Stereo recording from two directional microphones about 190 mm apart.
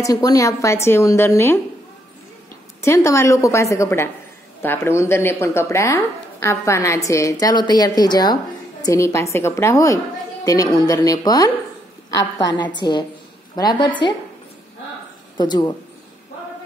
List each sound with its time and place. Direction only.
0.0 s speech: 20° left (ahead or behind)
2.8 s speech: 15° left (ahead or behind)
15.3 s speech: 20° left (ahead or behind)